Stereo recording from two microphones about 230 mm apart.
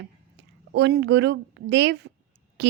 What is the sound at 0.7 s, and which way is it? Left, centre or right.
A woman's voice, right.